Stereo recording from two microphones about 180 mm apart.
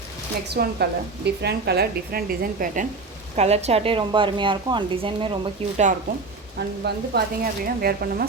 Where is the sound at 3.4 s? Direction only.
35° right (ahead or behind).